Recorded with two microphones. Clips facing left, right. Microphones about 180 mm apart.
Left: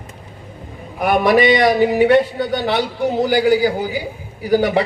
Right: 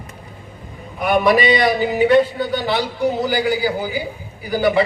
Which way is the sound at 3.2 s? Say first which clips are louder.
Left 4 dB; 60° left (ahead or behind).